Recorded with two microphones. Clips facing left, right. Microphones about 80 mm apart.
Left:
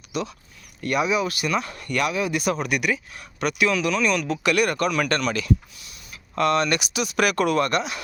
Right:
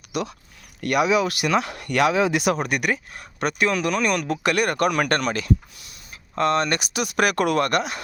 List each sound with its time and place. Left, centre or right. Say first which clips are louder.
0.1 s speech: right 1 dB; right
0.8 s speech: right 3 dB; right
2.6 s speech: right 1 dB; right
6.3 s speech: even; right